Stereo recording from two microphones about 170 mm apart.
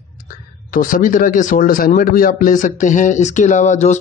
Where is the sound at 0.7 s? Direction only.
55° left (ahead or behind).